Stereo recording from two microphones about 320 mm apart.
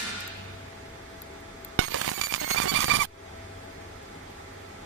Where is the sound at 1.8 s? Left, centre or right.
Right.